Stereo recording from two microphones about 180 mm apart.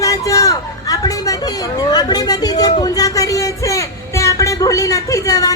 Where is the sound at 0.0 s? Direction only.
20° left (ahead or behind).